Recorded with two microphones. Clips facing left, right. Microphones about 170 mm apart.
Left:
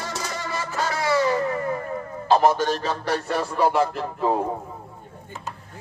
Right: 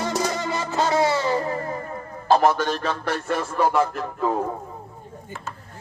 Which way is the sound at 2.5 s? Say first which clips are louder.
Even; 45° left (ahead or behind).